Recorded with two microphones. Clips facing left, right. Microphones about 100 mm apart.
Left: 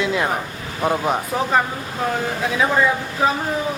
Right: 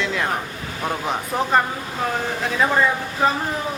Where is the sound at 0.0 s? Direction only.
10° left (ahead or behind).